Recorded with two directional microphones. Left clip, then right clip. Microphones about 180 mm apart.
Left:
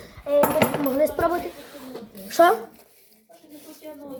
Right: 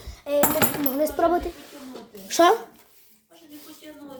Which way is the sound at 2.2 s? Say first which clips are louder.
Left 1 dB; 20° right (ahead or behind).